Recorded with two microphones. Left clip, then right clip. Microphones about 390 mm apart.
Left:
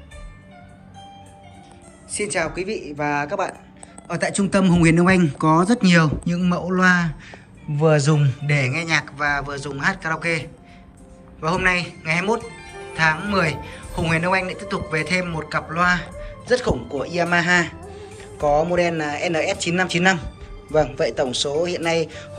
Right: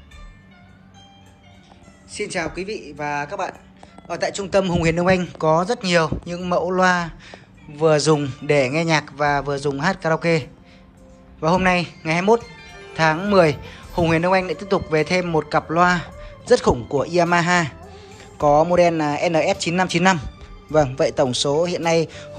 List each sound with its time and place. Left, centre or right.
2.1 s speech: centre